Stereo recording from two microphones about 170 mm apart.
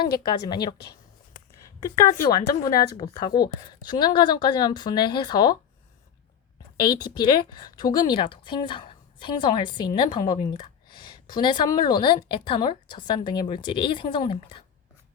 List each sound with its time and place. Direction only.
0.2 s speech: 25° left (ahead or behind)
1.8 s speech: 20° left (ahead or behind)
6.7 s speech: 25° left (ahead or behind)